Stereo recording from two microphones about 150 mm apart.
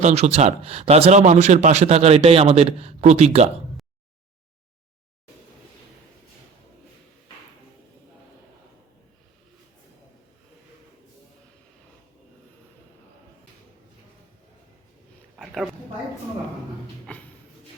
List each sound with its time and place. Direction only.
0.0 s speech: 45° right (ahead or behind)
15.4 s a sound: centre (ahead or behind)
17.1 s shuffle: 10° left (ahead or behind)